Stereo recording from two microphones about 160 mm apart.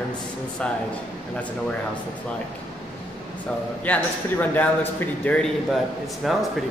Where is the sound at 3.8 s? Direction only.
10° left (ahead or behind).